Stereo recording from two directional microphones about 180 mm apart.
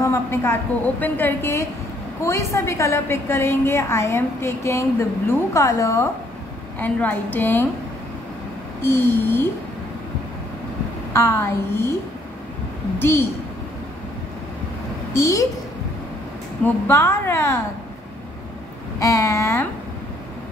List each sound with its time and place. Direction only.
0.0 s a woman's voice: 15° left (ahead or behind)
8.8 s a woman's voice: 10° left (ahead or behind)
11.1 s a woman's voice: 15° left (ahead or behind)
13.0 s a woman's voice: 15° left (ahead or behind)
15.1 s a woman's voice: 15° left (ahead or behind)
16.6 s a woman's voice: 15° left (ahead or behind)
18.9 s a woman's voice: 15° left (ahead or behind)